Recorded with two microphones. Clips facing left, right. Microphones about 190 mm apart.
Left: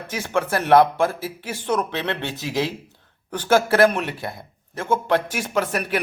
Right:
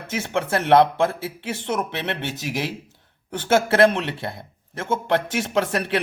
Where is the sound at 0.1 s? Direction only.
25° right (ahead or behind).